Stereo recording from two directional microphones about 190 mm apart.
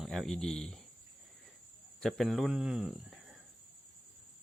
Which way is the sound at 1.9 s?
Centre (ahead or behind).